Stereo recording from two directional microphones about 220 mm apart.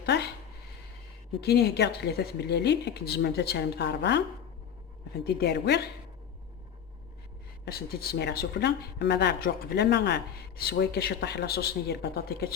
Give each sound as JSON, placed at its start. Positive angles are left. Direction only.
{"t": 0.0, "sound": "a sound", "side_deg": 50}
{"t": 1.4, "sound": "speech", "side_deg": 45}
{"t": 5.2, "sound": "speech", "side_deg": 50}
{"t": 7.6, "sound": "speech", "side_deg": 45}